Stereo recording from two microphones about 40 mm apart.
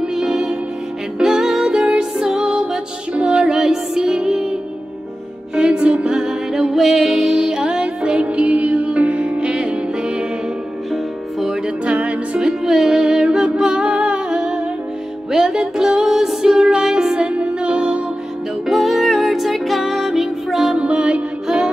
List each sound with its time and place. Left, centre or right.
0.0 s music: centre
3.4 s music: centre
5.6 s music: right
8.2 s music: right
10.9 s music: centre
11.6 s music: right
12.4 s music: centre
13.9 s humming: right
14.3 s music: right
16.4 s music: centre
18.7 s music: centre
20.7 s music: right